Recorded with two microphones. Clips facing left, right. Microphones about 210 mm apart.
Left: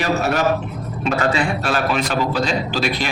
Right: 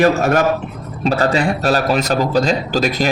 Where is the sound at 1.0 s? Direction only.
35° right (ahead or behind).